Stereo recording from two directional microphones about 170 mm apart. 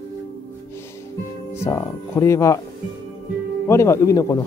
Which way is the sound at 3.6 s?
15° left (ahead or behind).